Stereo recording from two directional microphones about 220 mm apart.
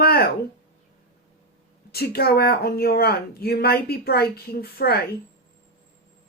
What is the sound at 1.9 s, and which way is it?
Speech, 45° left (ahead or behind).